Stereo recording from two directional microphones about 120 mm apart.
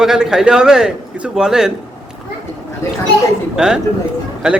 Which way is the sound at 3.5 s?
5° right (ahead or behind).